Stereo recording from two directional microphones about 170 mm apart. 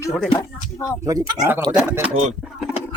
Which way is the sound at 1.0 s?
20° right (ahead or behind).